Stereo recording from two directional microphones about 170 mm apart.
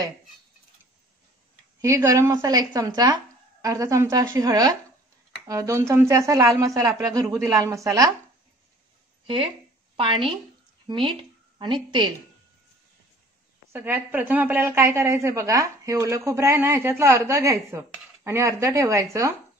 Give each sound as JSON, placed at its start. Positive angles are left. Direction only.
{"t": 1.8, "sound": "a woman's voice", "side_deg": -20}
{"t": 9.2, "sound": "a woman's voice", "side_deg": -30}
{"t": 13.7, "sound": "a woman's voice", "side_deg": -15}